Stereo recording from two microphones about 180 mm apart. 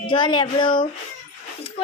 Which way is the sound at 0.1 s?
25° left (ahead or behind).